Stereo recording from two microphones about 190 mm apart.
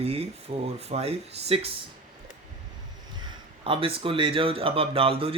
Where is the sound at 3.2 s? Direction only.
30° right (ahead or behind).